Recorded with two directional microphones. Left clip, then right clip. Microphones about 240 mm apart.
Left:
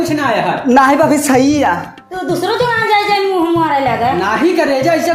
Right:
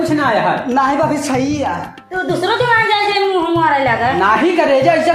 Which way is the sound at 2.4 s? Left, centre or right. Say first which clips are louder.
Right 1 dB; left.